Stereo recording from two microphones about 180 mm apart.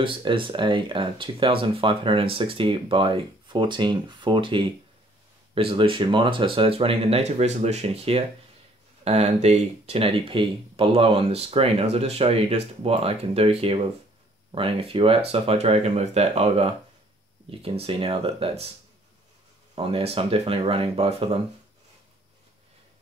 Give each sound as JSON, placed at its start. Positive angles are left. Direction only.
{"t": 0.0, "sound": "speech", "side_deg": -30}
{"t": 19.7, "sound": "speech", "side_deg": -30}